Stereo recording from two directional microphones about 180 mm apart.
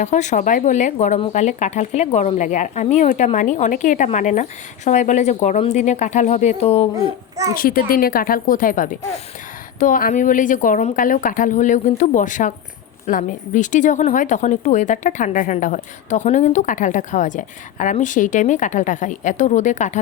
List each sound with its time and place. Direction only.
0.0 s speech: 40° left (ahead or behind)
7.5 s speech: 55° left (ahead or behind)